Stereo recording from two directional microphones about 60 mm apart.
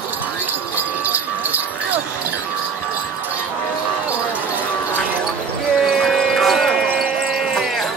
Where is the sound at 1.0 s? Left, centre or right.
Right.